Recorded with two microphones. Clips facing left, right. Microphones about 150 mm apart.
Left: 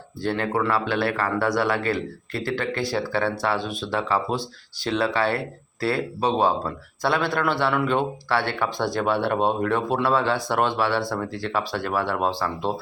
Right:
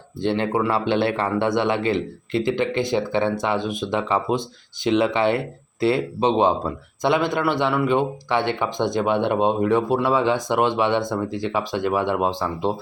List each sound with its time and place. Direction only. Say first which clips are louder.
0.2 s a man's voice: right 3 dB; 25° right (ahead or behind)